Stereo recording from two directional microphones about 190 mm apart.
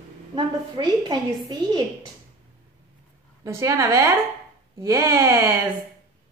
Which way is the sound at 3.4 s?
15° right (ahead or behind).